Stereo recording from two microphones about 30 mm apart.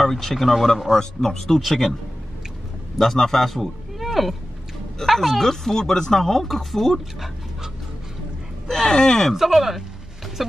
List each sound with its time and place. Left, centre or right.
0.0 s speech: centre
0.9 s speech: centre
1.5 s speech: centre
3.0 s speech: centre
4.0 s a sound: centre
5.0 s speech: centre
5.5 s speech: centre
8.6 s speech: centre
9.0 s speech: left
9.5 s a sound: centre